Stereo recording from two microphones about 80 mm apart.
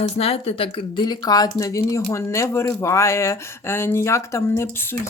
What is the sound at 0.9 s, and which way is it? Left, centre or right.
Speech, left.